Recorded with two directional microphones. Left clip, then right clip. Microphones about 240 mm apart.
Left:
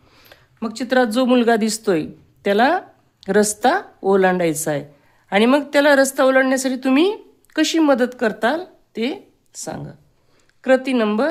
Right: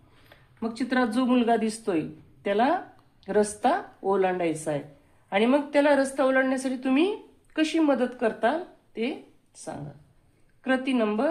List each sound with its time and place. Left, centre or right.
0.3 s a woman's voice: left